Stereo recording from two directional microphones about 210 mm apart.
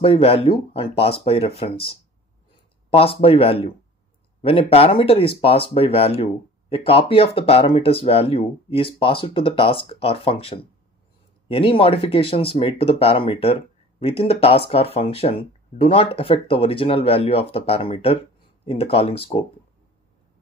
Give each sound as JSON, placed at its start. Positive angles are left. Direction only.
{"t": 0.0, "sound": "speech", "side_deg": 25}
{"t": 2.9, "sound": "speech", "side_deg": 25}